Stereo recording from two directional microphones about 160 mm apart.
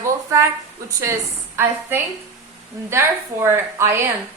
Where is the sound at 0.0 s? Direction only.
20° right (ahead or behind).